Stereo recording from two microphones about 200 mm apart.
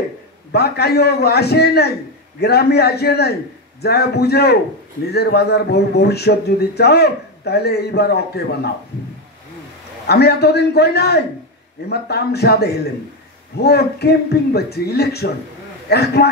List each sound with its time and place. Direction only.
0.5 s a man's voice: 55° left (ahead or behind)
10.0 s a man's voice: 55° left (ahead or behind)